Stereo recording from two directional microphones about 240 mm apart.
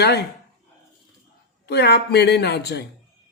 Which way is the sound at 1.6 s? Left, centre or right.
Left.